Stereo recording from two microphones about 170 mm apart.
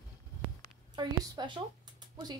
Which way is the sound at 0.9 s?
25° right (ahead or behind).